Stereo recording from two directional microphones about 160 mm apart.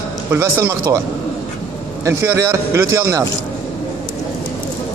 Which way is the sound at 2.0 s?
15° right (ahead or behind).